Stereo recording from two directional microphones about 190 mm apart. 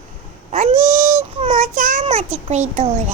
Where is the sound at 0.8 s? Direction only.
15° right (ahead or behind).